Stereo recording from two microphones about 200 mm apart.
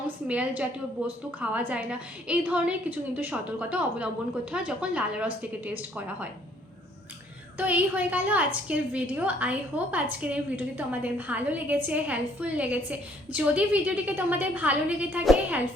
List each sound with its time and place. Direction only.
0.3 s a woman's voice: 5° right (ahead or behind)
7.6 s a woman's voice: 5° right (ahead or behind)